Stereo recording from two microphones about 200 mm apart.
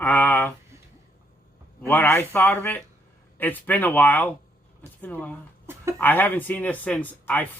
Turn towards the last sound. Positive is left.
turn(degrees=10)  # may be behind; listen again after turning